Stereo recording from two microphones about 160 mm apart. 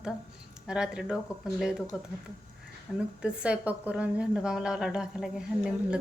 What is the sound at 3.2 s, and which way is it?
A woman's voice, 5° right (ahead or behind).